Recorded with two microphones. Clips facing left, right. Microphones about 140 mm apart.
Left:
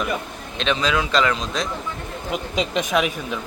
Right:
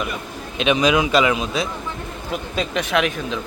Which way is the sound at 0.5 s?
10° right (ahead or behind).